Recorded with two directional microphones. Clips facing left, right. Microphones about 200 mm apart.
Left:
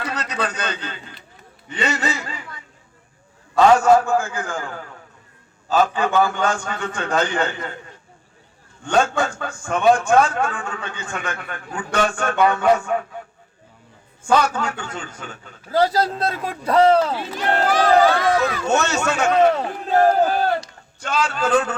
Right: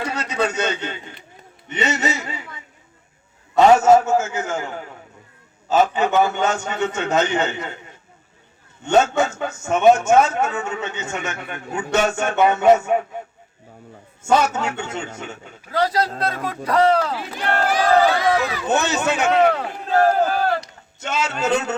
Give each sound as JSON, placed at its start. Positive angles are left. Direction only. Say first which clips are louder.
{"t": 0.1, "sound": "a man's voice", "louder": "right 3 dB", "side_deg": -25}
{"t": 8.8, "sound": "a man's voice", "louder": "right 2 dB", "side_deg": -25}
{"t": 14.2, "sound": "a man's voice", "louder": "even", "side_deg": -25}
{"t": 16.6, "sound": "speech", "louder": "left 2 dB", "side_deg": 25}
{"t": 17.7, "sound": "a man's voice", "louder": "left 1 dB", "side_deg": -15}
{"t": 18.3, "sound": "speech", "louder": "left 2 dB", "side_deg": 0}
{"t": 18.6, "sound": "a man's voice", "louder": "even", "side_deg": -15}
{"t": 19.5, "sound": "speech", "louder": "left 1 dB", "side_deg": 20}
{"t": 20.6, "sound": "a man's voice", "louder": "even", "side_deg": -25}